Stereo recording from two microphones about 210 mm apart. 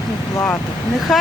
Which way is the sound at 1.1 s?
Centre (ahead or behind).